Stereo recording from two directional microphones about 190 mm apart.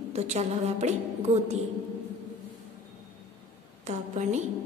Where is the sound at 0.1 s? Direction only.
35° right (ahead or behind).